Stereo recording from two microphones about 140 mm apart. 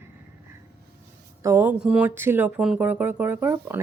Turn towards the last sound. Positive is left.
turn(degrees=-15)  # may be behind; listen again after turning